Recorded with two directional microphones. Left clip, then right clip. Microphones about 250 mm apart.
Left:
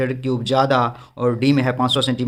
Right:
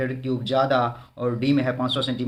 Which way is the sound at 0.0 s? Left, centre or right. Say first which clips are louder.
Left 5 dB; left.